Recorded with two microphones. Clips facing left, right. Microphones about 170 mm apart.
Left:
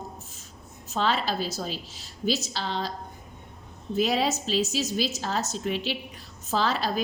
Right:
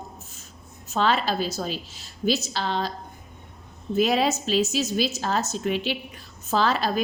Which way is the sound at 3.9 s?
55° right (ahead or behind).